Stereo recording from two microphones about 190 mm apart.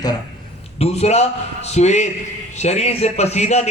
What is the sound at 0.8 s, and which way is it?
A man's voice, 35° left (ahead or behind).